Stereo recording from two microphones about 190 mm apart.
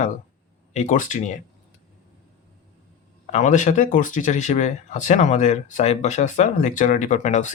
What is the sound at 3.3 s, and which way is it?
Speech, 40° left (ahead or behind).